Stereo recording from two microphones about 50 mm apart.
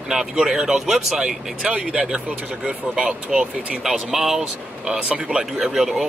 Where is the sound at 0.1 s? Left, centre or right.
Centre.